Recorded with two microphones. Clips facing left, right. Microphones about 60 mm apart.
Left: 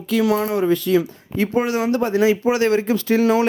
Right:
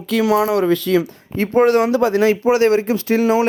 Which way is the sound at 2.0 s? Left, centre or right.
Right.